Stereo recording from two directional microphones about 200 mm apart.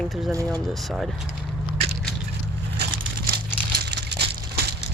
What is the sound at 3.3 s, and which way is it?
Crumpling, 55° right (ahead or behind).